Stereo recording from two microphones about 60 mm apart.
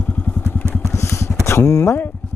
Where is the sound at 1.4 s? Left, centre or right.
Left.